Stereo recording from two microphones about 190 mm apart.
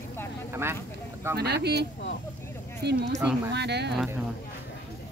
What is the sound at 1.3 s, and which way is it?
Speech, 60° right (ahead or behind).